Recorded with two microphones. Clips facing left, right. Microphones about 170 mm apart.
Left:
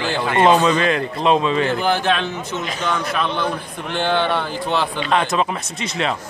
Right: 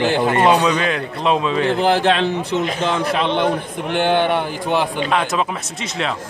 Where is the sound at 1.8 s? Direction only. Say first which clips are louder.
Right 4 dB; 30° right (ahead or behind); by 5.0 s 15° right (ahead or behind).